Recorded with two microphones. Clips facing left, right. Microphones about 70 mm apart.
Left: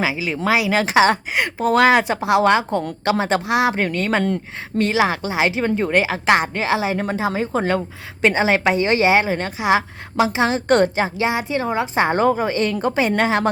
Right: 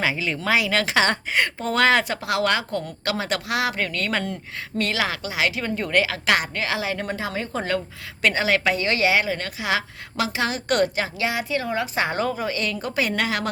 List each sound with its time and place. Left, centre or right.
0.0 s a woman's voice: centre; by 13.5 s left